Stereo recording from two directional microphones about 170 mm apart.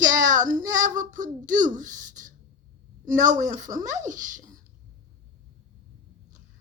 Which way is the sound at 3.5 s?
50° right (ahead or behind).